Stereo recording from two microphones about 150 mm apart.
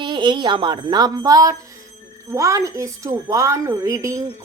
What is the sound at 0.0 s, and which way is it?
A woman's voice, 30° right (ahead or behind).